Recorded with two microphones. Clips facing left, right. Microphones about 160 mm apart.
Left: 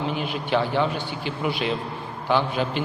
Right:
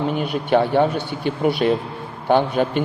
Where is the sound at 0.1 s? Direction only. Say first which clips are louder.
Right 6 dB; 50° right (ahead or behind).